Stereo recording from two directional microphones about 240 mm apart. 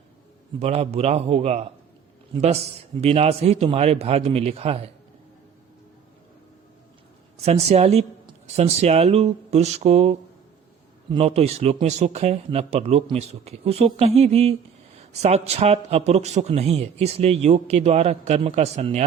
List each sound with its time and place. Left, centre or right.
0.6 s a man's voice: right
7.4 s a man's voice: right